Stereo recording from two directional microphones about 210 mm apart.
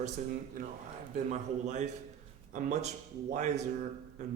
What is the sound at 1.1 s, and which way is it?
A man's voice, 35° right (ahead or behind).